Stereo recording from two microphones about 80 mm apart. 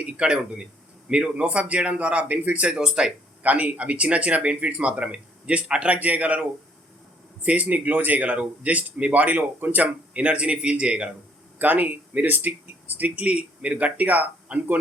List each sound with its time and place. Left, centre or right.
0.0 s speech: centre